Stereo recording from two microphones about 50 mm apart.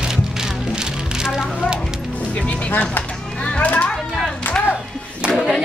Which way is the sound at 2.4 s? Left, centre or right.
Left.